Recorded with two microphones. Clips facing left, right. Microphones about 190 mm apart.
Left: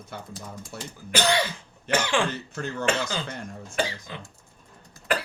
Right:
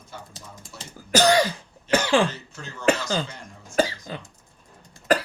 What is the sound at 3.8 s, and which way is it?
Cough, 40° right (ahead or behind).